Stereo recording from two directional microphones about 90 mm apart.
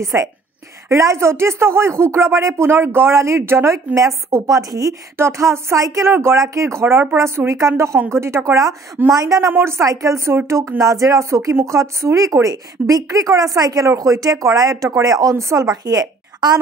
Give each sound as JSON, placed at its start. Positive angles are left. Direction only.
{"t": 0.0, "sound": "speech", "side_deg": -40}
{"t": 5.1, "sound": "speech", "side_deg": -30}
{"t": 9.5, "sound": "speech", "side_deg": -30}